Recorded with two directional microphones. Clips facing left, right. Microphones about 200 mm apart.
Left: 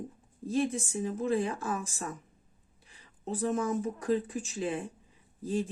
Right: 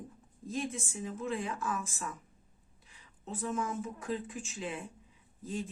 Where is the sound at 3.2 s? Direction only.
35° left (ahead or behind).